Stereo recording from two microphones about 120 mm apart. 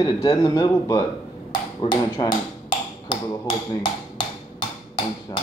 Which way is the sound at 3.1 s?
40° left (ahead or behind).